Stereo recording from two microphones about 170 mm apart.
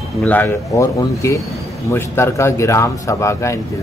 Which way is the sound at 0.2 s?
10° left (ahead or behind).